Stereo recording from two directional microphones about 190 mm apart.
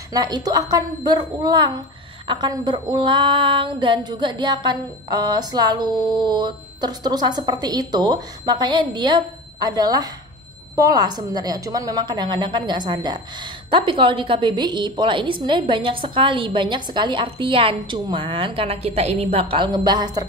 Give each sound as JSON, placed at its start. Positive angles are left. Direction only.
{"t": 0.1, "sound": "a woman's voice", "side_deg": -20}